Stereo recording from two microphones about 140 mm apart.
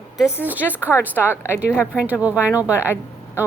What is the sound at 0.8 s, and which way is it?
A woman's voice, 15° left (ahead or behind).